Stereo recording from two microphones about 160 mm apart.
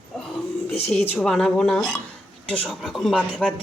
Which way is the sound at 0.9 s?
5° left (ahead or behind).